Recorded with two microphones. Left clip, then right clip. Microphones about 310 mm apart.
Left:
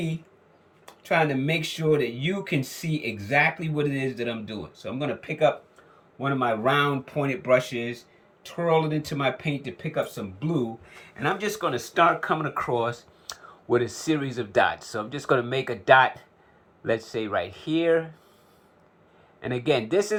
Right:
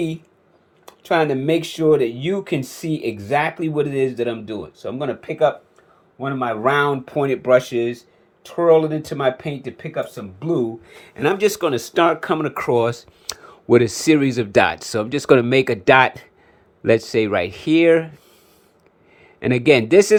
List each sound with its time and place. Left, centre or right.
0.9 s speech: centre
11.0 s speech: right
19.4 s speech: right